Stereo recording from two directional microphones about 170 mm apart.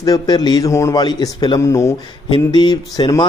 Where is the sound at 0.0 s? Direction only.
25° left (ahead or behind).